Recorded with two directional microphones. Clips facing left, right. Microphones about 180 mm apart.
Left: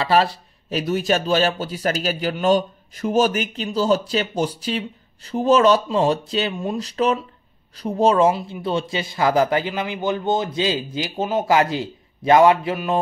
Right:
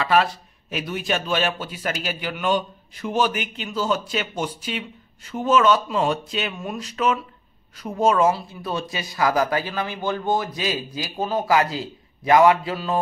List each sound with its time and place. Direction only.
0.0 s a man's voice: 35° left (ahead or behind)